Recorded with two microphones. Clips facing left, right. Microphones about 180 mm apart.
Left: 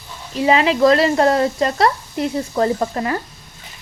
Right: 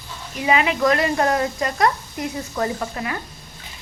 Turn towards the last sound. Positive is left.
turn(degrees=35)  # may be behind; listen again after turning